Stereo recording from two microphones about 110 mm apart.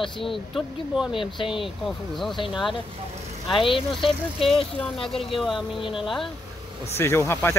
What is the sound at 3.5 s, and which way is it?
Speech, 50° left (ahead or behind).